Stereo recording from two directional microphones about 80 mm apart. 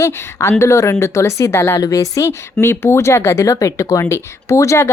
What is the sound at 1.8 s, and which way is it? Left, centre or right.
Speech, left.